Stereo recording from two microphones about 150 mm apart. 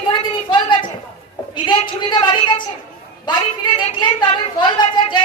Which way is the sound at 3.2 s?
30° left (ahead or behind).